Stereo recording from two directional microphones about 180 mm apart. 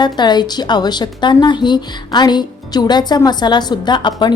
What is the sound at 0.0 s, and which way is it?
A woman's voice, 25° left (ahead or behind).